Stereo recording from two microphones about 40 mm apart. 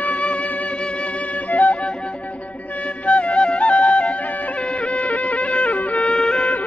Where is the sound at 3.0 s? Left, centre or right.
Left.